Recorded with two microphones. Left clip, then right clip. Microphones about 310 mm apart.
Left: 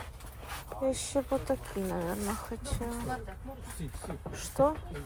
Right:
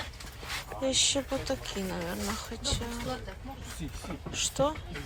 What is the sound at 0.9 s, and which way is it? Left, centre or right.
Speech, centre.